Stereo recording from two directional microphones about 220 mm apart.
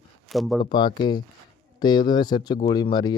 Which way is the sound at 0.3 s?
Centre (ahead or behind).